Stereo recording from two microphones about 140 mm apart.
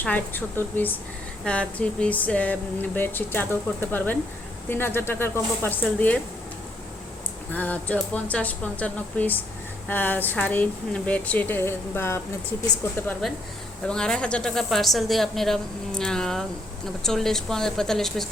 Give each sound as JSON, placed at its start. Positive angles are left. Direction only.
{"t": 0.0, "sound": "speech", "side_deg": 10}
{"t": 7.5, "sound": "speech", "side_deg": 10}
{"t": 13.8, "sound": "a woman's voice", "side_deg": 5}